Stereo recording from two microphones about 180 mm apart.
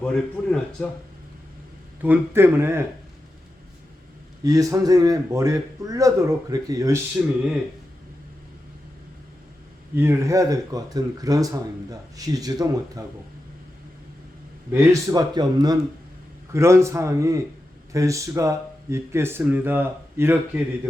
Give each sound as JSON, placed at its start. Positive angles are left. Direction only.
{"t": 0.0, "sound": "speech", "side_deg": 5}
{"t": 2.0, "sound": "speech", "side_deg": -10}
{"t": 4.4, "sound": "speech", "side_deg": -20}
{"t": 9.9, "sound": "speech", "side_deg": -15}
{"t": 14.7, "sound": "speech", "side_deg": -20}